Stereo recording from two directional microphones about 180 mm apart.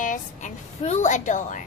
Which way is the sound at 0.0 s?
45° left (ahead or behind).